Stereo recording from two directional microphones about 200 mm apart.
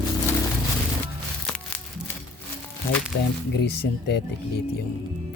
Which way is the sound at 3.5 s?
60° left (ahead or behind).